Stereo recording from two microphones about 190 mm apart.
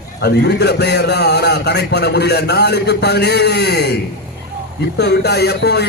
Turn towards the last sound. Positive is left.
turn(degrees=60)  # may be behind; listen again after turning